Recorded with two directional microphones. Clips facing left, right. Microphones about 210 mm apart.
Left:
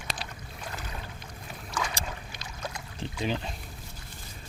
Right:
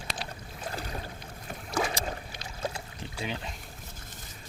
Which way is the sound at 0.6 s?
35° right (ahead or behind).